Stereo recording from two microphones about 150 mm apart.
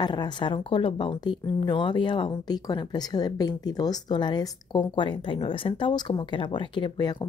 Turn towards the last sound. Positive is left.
turn(degrees=30)  # may be behind; listen again after turning